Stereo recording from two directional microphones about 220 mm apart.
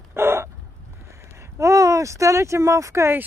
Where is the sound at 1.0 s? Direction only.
10° right (ahead or behind).